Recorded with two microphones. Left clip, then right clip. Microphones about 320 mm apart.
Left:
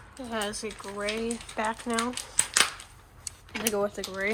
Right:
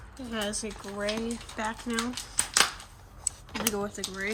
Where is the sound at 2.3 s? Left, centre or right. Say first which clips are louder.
Even; right.